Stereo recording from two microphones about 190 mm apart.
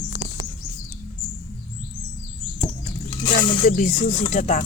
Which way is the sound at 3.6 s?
40° left (ahead or behind).